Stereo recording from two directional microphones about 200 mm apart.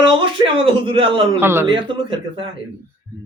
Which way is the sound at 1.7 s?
25° right (ahead or behind).